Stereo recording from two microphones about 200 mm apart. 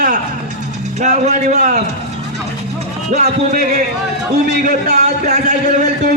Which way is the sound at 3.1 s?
35° right (ahead or behind).